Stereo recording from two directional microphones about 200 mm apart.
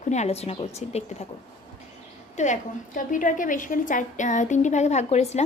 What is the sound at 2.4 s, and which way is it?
A woman's voice, 40° left (ahead or behind).